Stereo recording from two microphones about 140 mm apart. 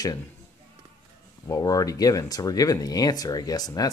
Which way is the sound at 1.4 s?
25° left (ahead or behind).